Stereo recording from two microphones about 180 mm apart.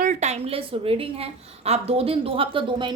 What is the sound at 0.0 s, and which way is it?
A woman's voice, 45° right (ahead or behind).